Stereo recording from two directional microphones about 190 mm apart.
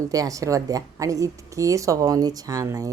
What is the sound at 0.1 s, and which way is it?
Speech, 20° right (ahead or behind).